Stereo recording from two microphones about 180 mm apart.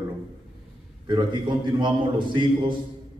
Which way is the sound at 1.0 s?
25° right (ahead or behind).